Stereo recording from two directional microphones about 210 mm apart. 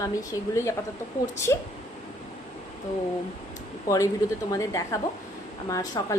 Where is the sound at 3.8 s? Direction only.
15° left (ahead or behind).